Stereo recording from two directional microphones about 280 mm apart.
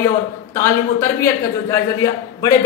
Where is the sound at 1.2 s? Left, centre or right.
Centre.